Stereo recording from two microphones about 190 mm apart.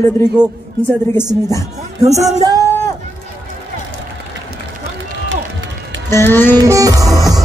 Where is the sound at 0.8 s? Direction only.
10° left (ahead or behind).